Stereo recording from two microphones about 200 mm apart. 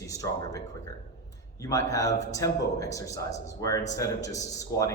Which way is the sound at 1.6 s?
15° left (ahead or behind).